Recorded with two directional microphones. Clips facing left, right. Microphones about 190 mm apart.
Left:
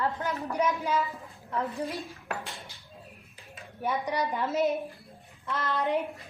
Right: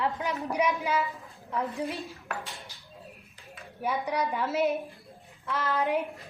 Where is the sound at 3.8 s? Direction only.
5° right (ahead or behind).